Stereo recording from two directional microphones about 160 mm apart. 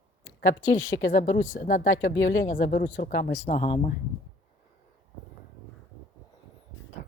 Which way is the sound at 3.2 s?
90° left.